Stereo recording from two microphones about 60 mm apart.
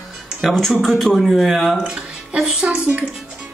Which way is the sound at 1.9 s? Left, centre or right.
Centre.